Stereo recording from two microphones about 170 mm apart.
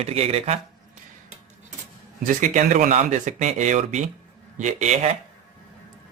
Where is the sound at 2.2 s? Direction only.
50° right (ahead or behind).